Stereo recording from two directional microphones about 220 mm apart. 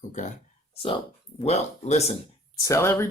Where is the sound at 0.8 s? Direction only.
25° left (ahead or behind).